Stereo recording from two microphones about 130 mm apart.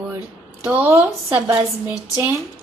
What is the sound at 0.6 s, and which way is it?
Speech, 15° right (ahead or behind).